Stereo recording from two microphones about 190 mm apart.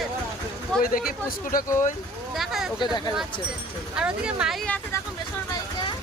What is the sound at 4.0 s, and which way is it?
Speech, 5° right (ahead or behind).